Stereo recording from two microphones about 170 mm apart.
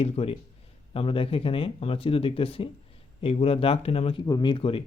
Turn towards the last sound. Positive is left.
turn(degrees=30)  # may be behind; listen again after turning